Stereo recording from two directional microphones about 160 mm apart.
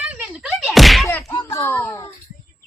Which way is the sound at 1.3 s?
25° left (ahead or behind).